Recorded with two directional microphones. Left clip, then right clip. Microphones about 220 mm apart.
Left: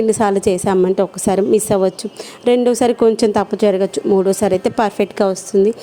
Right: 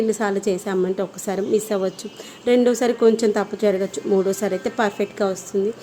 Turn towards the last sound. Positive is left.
turn(degrees=35)  # may be behind; listen again after turning